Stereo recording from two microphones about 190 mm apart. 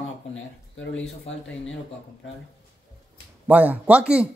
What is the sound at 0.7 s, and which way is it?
Speech, 80° left.